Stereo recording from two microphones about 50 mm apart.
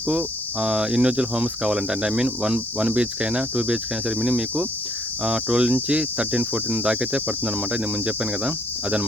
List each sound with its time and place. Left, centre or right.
0.2 s speech: centre